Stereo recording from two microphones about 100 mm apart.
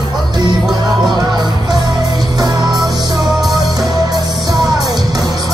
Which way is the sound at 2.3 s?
40° right (ahead or behind).